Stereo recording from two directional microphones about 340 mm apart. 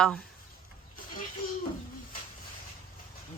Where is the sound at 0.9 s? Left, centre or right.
Left.